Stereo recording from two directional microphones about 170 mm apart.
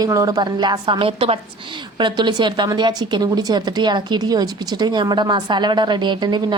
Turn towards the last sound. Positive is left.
turn(degrees=-25)  # may be behind; listen again after turning